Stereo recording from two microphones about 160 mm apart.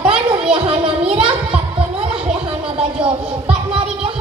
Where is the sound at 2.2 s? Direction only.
35° right (ahead or behind).